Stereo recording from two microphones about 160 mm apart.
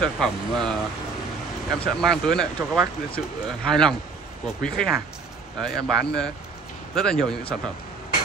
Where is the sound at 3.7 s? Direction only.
5° left (ahead or behind).